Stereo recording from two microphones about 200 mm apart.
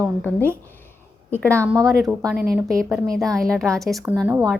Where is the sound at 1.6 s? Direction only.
15° right (ahead or behind).